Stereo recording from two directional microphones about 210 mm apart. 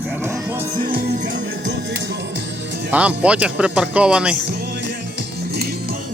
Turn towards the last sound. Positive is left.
turn(degrees=-5)  # may be behind; listen again after turning